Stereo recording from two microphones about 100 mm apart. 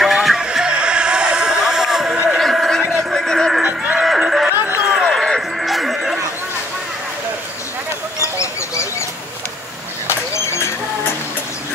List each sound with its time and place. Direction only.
0.0 s music: centre (ahead or behind)
2.3 s a sound: centre (ahead or behind)
3.0 s music: 5° left (ahead or behind)
3.6 s music: 10° right (ahead or behind)
4.5 s run: 20° right (ahead or behind)
4.8 s music: 5° right (ahead or behind)
8.2 s a sound: 30° left (ahead or behind)
10.0 s vehicle: 25° left (ahead or behind)